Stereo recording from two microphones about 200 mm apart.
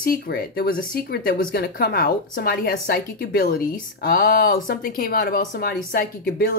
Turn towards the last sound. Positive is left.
turn(degrees=50)  # may be behind; listen again after turning